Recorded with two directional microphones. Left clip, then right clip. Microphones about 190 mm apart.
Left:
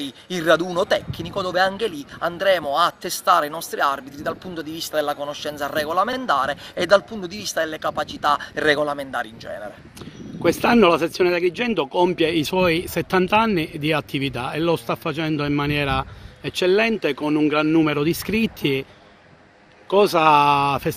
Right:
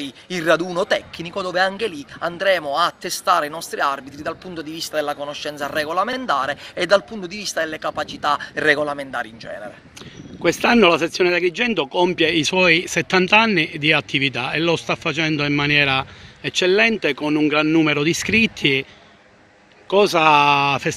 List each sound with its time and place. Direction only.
0.0 s speech: centre (ahead or behind)
19.9 s speech: 5° right (ahead or behind)